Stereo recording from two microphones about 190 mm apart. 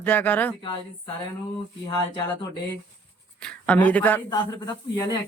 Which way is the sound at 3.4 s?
5° left (ahead or behind).